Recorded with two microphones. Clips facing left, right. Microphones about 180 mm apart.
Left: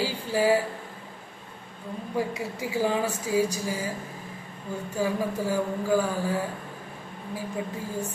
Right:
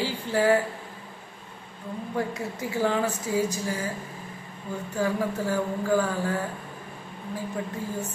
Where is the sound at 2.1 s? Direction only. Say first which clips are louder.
Left 1 dB; 10° left (ahead or behind).